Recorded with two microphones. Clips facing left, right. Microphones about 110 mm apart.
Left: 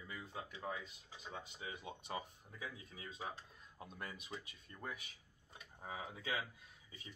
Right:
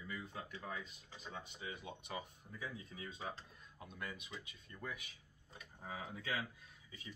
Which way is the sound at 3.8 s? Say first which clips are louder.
Right 1 dB; 35° left (ahead or behind).